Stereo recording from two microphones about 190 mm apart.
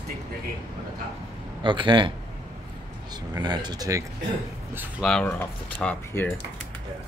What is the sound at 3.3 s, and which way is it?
Speech, 20° right (ahead or behind).